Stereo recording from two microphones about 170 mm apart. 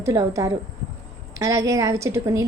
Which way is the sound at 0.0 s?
20° right (ahead or behind).